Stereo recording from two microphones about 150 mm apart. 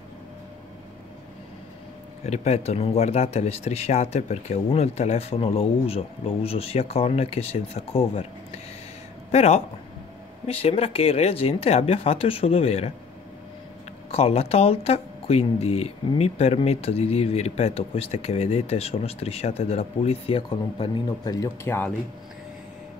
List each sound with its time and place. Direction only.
2.2 s speech: 45° left (ahead or behind)
9.3 s speech: 45° left (ahead or behind)
14.1 s speech: 45° left (ahead or behind)
21.3 s speech: 25° left (ahead or behind)